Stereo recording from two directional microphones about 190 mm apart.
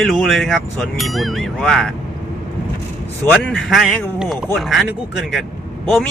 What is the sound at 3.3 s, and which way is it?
Speech, centre (ahead or behind).